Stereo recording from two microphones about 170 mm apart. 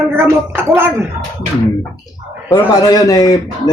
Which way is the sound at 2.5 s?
20° left (ahead or behind).